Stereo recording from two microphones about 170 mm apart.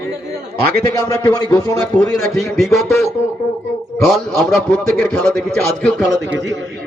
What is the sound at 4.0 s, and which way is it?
A man's voice, 5° left (ahead or behind).